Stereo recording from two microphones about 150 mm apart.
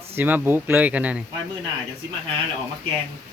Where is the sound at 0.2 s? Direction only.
15° right (ahead or behind).